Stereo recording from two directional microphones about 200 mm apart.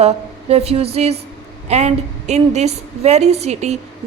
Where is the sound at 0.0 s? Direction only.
30° right (ahead or behind).